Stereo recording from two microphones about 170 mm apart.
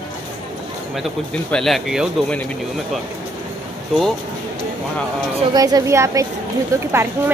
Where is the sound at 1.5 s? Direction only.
Centre (ahead or behind).